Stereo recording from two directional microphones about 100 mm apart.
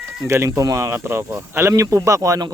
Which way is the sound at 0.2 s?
30° right (ahead or behind).